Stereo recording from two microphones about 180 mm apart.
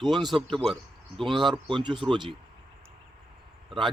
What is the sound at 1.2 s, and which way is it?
Speech, 25° right (ahead or behind).